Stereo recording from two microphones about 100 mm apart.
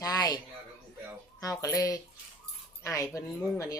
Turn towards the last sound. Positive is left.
turn(degrees=30)  # may be behind; listen again after turning